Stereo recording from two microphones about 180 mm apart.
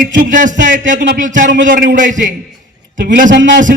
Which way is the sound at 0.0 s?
50° right (ahead or behind).